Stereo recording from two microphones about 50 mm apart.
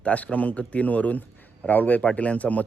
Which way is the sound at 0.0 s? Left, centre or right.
Left.